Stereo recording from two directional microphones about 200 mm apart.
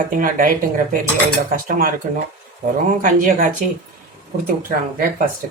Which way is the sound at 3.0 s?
40° right (ahead or behind).